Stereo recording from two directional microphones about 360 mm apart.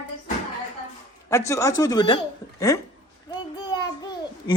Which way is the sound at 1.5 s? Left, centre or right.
Centre.